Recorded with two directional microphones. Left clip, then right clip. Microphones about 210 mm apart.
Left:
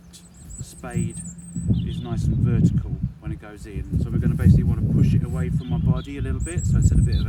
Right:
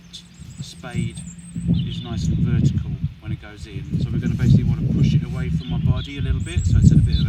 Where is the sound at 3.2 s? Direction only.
20° left (ahead or behind).